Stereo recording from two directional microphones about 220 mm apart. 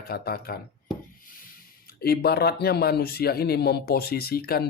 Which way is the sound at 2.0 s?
45° left (ahead or behind).